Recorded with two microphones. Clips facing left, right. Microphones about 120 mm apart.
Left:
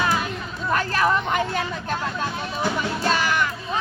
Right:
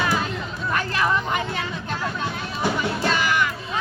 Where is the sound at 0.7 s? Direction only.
40° left (ahead or behind).